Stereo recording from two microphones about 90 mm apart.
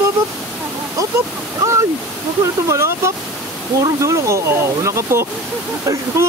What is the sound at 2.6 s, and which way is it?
Speech, 30° right (ahead or behind).